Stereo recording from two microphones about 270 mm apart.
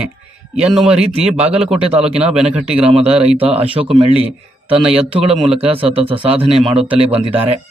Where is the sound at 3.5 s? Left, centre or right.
Right.